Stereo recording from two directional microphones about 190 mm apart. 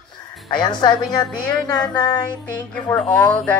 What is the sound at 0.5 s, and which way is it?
Speech, 20° left (ahead or behind).